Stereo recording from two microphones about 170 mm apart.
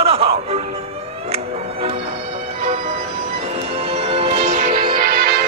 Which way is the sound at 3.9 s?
35° right (ahead or behind).